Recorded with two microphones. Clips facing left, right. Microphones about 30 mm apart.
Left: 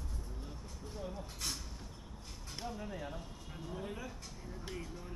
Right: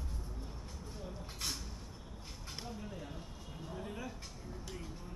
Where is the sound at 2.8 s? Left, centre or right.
Centre.